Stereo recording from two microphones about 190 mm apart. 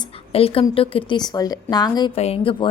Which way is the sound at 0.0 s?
30° left (ahead or behind).